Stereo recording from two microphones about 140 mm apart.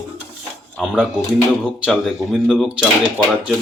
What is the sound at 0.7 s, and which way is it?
Speech, centre (ahead or behind).